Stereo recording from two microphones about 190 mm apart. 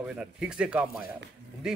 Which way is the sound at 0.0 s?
5° right (ahead or behind).